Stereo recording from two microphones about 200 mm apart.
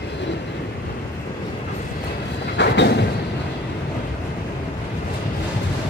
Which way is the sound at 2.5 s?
60° left (ahead or behind).